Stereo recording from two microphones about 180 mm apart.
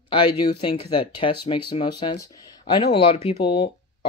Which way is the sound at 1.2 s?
25° left (ahead or behind).